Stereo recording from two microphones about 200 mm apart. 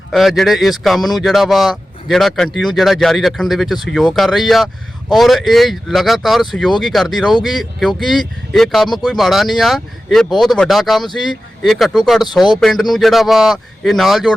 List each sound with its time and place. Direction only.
0.1 s speech: centre (ahead or behind)